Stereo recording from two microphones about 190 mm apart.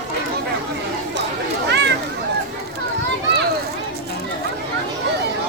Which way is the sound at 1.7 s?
60° right (ahead or behind).